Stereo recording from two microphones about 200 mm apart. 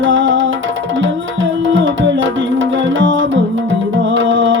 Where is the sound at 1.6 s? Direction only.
70° right (ahead or behind).